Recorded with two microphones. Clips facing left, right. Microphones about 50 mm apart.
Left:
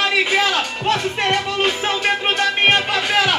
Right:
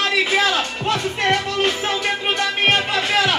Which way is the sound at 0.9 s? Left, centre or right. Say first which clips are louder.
Left 1 dB; centre.